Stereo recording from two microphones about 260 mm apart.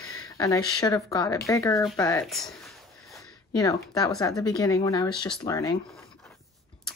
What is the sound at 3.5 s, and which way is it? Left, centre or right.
Speech, centre.